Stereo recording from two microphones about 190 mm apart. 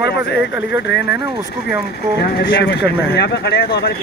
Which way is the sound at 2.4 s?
65° left (ahead or behind).